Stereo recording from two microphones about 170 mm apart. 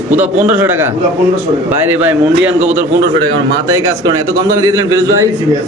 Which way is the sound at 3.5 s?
20° right (ahead or behind).